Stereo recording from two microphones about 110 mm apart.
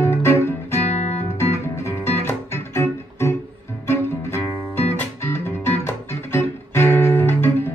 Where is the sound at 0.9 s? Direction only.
90° left.